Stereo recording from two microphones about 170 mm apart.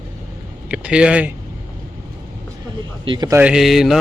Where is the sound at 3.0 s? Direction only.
25° right (ahead or behind).